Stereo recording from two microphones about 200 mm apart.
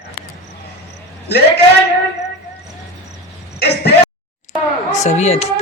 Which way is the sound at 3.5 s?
55° left (ahead or behind).